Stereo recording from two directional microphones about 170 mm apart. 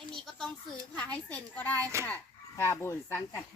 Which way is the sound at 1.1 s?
10° left (ahead or behind).